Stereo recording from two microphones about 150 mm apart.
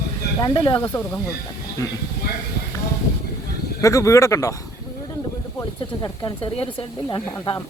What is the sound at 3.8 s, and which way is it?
Speech, 20° left (ahead or behind).